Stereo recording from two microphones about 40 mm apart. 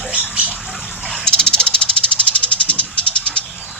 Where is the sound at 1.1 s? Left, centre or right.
Centre.